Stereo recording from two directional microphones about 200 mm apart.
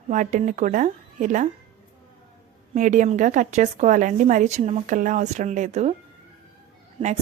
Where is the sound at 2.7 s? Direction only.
40° right (ahead or behind).